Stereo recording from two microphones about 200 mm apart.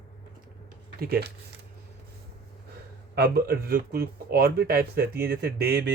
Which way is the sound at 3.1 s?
50° right (ahead or behind).